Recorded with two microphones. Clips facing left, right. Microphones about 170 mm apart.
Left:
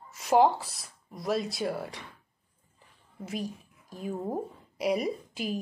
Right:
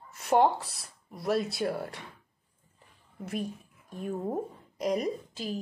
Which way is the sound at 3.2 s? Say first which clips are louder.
Right 1 dB; centre (ahead or behind).